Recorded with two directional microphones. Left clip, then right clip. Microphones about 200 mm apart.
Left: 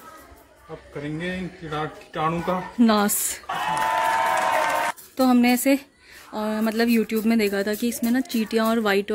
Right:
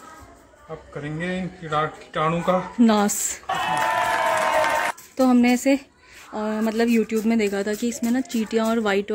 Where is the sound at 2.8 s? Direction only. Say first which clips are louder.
Right 1 dB; centre (ahead or behind).